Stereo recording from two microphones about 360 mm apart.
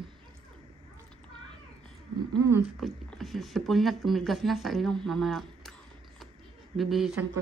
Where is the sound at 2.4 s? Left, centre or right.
Centre.